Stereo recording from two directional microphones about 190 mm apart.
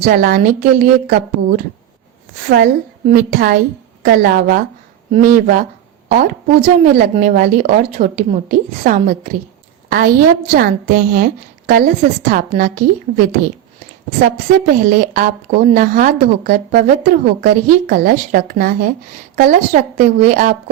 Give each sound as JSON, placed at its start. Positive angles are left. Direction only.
{"t": 0.0, "sound": "speech", "side_deg": -45}
{"t": 14.8, "sound": "speech", "side_deg": -45}